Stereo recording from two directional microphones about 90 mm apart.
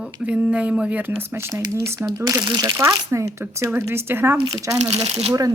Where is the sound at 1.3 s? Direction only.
30° right (ahead or behind).